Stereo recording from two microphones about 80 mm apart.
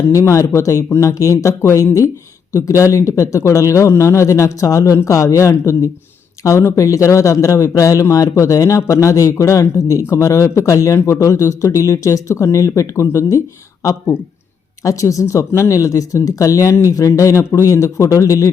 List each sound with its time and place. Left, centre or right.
0.1 s speech: left
14.8 s speech: left